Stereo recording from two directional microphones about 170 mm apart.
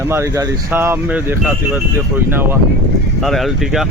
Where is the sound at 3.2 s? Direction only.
Centre (ahead or behind).